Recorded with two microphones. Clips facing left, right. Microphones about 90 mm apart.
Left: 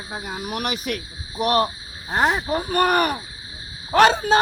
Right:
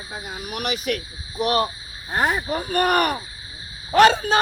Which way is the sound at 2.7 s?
35° left (ahead or behind).